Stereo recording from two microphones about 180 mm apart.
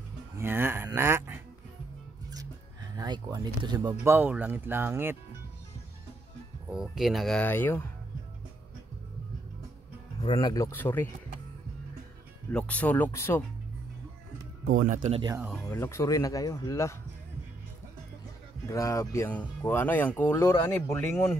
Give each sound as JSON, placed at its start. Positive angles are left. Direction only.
{"t": 0.4, "sound": "a sound", "side_deg": -10}
{"t": 3.0, "sound": "speech", "side_deg": -20}
{"t": 6.7, "sound": "speech", "side_deg": 0}
{"t": 10.2, "sound": "speech", "side_deg": 25}
{"t": 12.5, "sound": "speech", "side_deg": 5}
{"t": 14.7, "sound": "speech", "side_deg": -45}
{"t": 15.3, "sound": "speech", "side_deg": -5}
{"t": 15.7, "sound": "speech", "side_deg": 15}
{"t": 18.7, "sound": "speech", "side_deg": 20}